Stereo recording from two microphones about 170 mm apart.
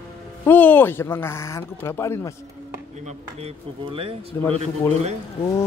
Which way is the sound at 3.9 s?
35° right (ahead or behind).